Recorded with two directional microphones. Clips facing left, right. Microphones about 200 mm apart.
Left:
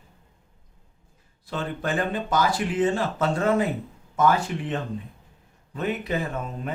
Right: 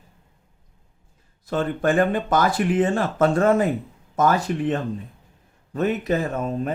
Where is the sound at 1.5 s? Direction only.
50° right (ahead or behind).